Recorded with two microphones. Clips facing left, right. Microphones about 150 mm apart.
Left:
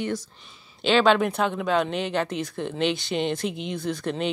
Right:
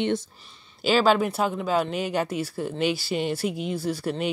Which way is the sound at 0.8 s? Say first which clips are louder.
Left 1 dB; 5° right (ahead or behind).